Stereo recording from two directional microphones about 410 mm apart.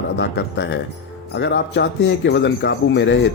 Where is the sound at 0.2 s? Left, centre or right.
Left.